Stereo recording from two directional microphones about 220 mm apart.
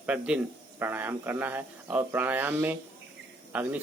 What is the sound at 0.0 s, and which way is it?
Speech, 5° right (ahead or behind).